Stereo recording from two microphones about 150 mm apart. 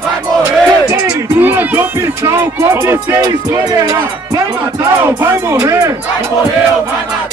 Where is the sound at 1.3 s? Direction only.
10° right (ahead or behind).